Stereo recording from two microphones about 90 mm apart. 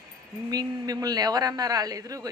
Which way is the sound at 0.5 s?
45° right (ahead or behind).